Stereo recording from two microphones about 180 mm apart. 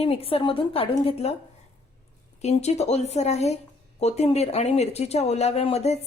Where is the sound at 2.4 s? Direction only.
35° left (ahead or behind).